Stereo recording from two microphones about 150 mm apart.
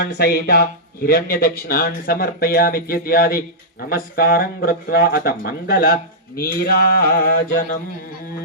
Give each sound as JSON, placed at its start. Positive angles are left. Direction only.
{"t": 0.2, "sound": "speech", "side_deg": 90}